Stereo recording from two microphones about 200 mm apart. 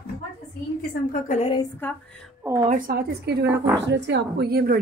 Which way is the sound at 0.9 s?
40° left (ahead or behind).